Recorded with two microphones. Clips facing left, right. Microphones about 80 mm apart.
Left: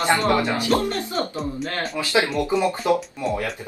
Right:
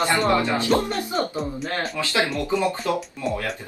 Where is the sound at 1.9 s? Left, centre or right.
Left.